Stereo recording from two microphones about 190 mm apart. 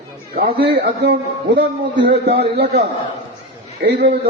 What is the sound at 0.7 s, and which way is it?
A man's voice, 60° right (ahead or behind).